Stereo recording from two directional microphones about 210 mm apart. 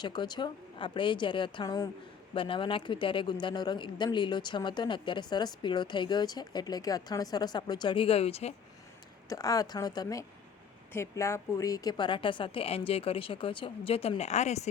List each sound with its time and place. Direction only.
0.0 s speech: 20° left (ahead or behind)
9.3 s a woman's voice: 15° left (ahead or behind); by 14.7 s 35° left (ahead or behind)